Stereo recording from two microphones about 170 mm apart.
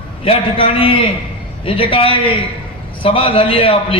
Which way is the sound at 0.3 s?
35° left (ahead or behind).